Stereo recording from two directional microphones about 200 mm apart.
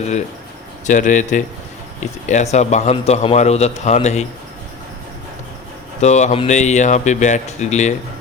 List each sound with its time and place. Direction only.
0.9 s speech: 40° left (ahead or behind)
6.0 s speech: 35° left (ahead or behind)